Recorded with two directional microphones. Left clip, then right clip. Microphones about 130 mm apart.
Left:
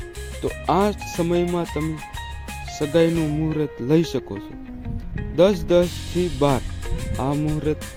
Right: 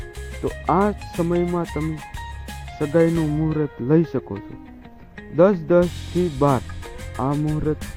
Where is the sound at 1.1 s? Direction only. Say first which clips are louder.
Even; 25° left (ahead or behind).